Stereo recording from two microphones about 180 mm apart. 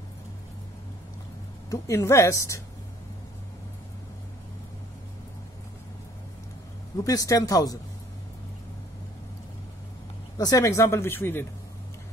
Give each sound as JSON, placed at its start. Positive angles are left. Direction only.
{"t": 1.7, "sound": "speech", "side_deg": 15}
{"t": 7.1, "sound": "speech", "side_deg": 20}
{"t": 10.3, "sound": "speech", "side_deg": 20}